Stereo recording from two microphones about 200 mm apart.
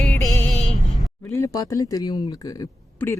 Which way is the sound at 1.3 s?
15° left (ahead or behind).